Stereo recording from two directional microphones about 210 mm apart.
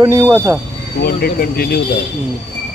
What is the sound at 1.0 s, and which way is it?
Speech, 45° left (ahead or behind).